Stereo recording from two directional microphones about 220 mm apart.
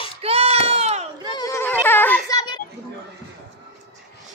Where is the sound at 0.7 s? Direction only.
30° right (ahead or behind).